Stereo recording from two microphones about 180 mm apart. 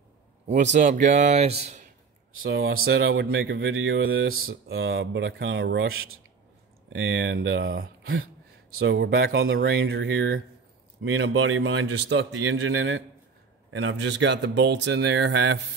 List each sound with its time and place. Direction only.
0.7 s speech: 45° right (ahead or behind)
2.4 s a man's voice: 90° right
4.4 s a man's voice: 80° right
6.9 s a man's voice: 90° right
8.7 s a man's voice: 75° right (ahead or behind)